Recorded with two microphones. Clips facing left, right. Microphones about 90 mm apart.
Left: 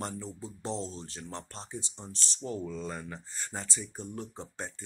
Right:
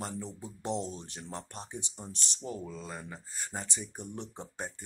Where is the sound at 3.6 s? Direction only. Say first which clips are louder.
Left 1 dB; 20° right (ahead or behind).